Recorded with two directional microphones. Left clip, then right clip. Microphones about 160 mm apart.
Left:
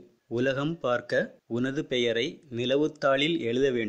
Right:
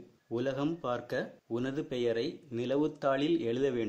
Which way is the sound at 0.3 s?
50° left (ahead or behind).